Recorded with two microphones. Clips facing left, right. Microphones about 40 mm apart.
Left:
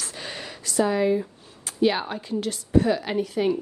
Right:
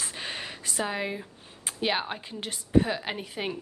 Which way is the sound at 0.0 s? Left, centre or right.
Right.